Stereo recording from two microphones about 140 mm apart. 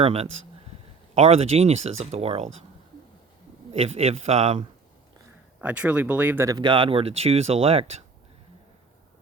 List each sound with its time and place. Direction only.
0.0 s speech: 45° right (ahead or behind)
3.7 s speech: 45° right (ahead or behind)
5.5 s speech: 10° right (ahead or behind)
6.5 s speech: 35° right (ahead or behind)